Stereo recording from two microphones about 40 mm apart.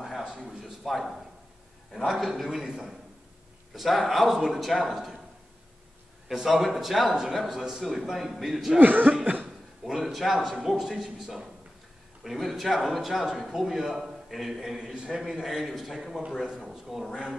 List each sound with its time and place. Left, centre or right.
0.4 s a man's voice: centre
2.2 s a man's voice: centre
6.2 s a man's voice: centre
8.7 s speech: right
9.8 s a man's voice: centre